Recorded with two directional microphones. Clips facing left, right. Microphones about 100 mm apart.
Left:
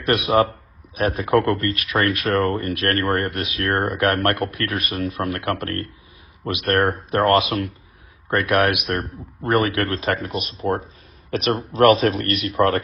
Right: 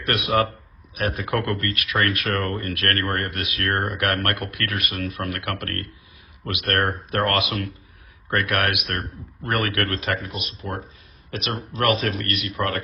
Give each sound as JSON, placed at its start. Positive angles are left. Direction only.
{"t": 0.9, "sound": "speech", "side_deg": 25}